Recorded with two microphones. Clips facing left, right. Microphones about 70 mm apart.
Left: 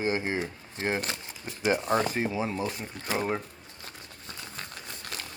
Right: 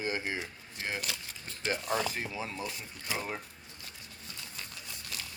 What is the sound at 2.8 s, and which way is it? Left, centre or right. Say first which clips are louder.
Speech: left 6 dB; left.